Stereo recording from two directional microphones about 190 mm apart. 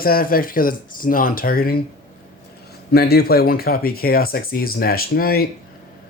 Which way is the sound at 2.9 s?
55° left (ahead or behind).